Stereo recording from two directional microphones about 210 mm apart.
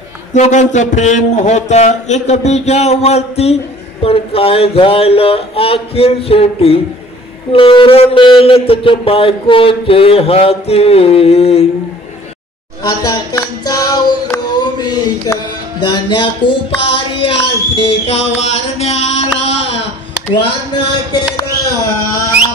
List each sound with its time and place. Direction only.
0.3 s a man's voice: 35° left (ahead or behind)
12.8 s music: 20° left (ahead or behind)
15.8 s speech: 20° left (ahead or behind)